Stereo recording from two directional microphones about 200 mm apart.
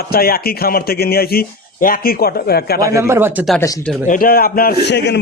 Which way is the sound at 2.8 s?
15° right (ahead or behind).